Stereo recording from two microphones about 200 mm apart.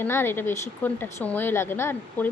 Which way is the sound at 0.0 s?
10° left (ahead or behind).